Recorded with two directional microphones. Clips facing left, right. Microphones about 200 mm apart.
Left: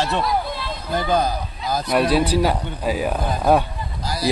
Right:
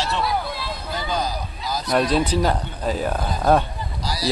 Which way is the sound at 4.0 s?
50° left (ahead or behind).